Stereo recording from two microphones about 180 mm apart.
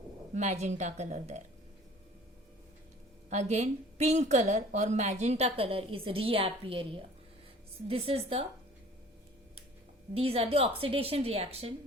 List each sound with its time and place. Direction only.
0.3 s a woman's voice: 40° right (ahead or behind)
3.2 s a woman's voice: 40° right (ahead or behind)
10.2 s a woman's voice: 35° right (ahead or behind)